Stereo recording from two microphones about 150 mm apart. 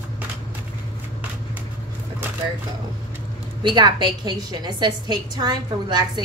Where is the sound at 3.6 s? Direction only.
30° right (ahead or behind).